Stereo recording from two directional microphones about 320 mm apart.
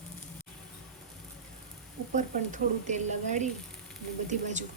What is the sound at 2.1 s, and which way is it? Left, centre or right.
Speech, right.